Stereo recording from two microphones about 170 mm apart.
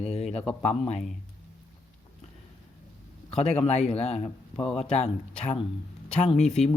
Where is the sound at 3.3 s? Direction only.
40° left (ahead or behind).